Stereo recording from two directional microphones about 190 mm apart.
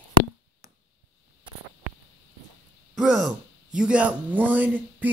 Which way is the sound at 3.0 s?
Centre (ahead or behind).